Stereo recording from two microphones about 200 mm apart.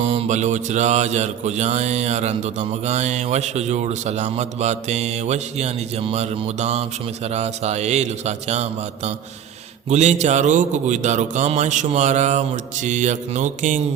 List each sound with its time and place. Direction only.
0.0 s mantra: 30° right (ahead or behind)